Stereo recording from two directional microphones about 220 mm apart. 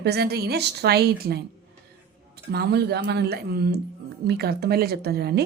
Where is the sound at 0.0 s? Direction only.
50° right (ahead or behind).